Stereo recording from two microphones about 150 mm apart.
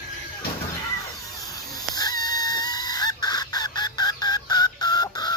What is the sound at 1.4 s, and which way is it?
Chicken, 25° left (ahead or behind).